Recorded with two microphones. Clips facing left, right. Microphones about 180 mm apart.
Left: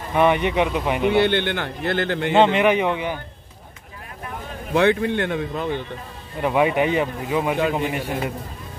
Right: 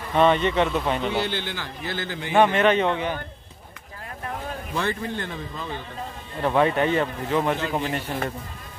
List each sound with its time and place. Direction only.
0.1 s speech: 15° left (ahead or behind)
1.1 s a man's voice: 65° left (ahead or behind)
2.3 s speech: 20° left (ahead or behind)
4.7 s speech: 70° left (ahead or behind)
6.4 s speech: 10° left (ahead or behind)